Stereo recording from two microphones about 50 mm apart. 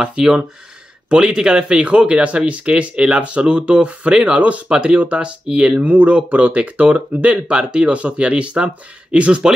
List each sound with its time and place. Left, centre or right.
0.0 s speech: centre